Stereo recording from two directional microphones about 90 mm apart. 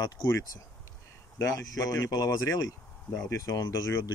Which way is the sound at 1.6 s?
40° left (ahead or behind).